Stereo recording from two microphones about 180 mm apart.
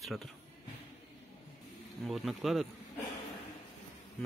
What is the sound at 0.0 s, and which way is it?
Speech, centre (ahead or behind).